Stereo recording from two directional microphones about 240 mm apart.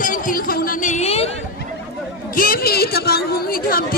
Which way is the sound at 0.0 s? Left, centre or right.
Left.